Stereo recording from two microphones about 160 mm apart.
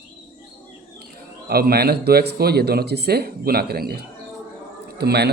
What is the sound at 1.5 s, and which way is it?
Speech, 75° right (ahead or behind).